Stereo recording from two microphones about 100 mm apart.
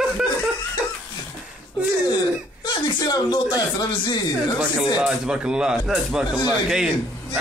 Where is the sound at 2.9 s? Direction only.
45° left (ahead or behind).